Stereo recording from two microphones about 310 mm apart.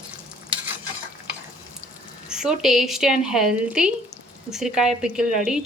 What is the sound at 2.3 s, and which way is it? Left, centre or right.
Speech, centre.